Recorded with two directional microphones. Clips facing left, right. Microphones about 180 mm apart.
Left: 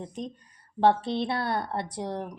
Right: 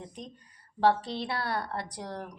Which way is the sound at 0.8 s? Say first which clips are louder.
Left 3 dB; 25° left (ahead or behind).